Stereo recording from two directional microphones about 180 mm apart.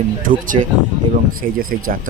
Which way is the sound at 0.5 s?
30° right (ahead or behind).